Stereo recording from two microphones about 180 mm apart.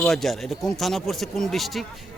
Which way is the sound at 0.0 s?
Centre (ahead or behind).